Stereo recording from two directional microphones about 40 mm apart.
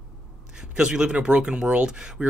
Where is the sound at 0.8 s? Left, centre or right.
Centre.